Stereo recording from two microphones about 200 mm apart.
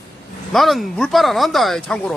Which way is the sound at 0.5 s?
Centre (ahead or behind).